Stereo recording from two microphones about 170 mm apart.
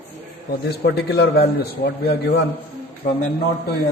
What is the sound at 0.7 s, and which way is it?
Speech, 70° left (ahead or behind).